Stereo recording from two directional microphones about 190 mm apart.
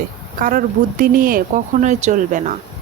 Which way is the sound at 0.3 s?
50° right (ahead or behind).